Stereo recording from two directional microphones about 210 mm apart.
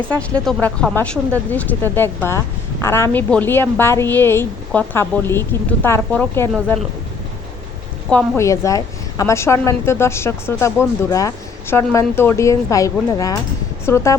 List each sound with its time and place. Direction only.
0.1 s a woman's voice: 5° left (ahead or behind)
8.1 s a woman's voice: 15° left (ahead or behind)